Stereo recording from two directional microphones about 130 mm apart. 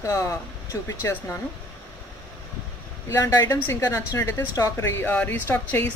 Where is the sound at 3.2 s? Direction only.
25° left (ahead or behind).